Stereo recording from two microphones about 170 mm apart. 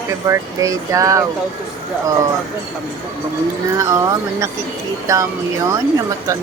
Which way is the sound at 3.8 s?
20° right (ahead or behind).